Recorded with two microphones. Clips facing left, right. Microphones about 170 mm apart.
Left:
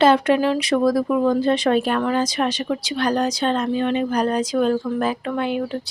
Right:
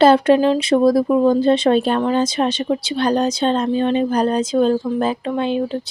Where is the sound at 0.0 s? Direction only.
30° right (ahead or behind).